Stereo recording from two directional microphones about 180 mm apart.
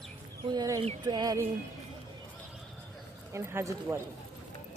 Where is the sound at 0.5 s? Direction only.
20° right (ahead or behind).